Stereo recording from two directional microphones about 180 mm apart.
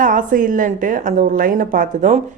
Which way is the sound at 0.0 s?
50° right (ahead or behind).